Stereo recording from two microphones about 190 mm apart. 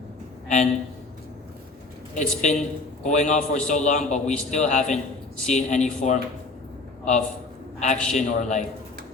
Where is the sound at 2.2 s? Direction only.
40° left (ahead or behind).